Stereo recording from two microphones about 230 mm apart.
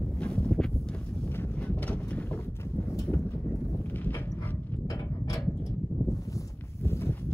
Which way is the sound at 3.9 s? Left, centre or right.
Centre.